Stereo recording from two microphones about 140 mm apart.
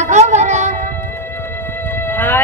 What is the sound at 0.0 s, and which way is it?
Music, 55° right (ahead or behind).